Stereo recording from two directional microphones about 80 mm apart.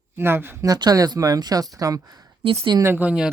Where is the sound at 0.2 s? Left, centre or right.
Right.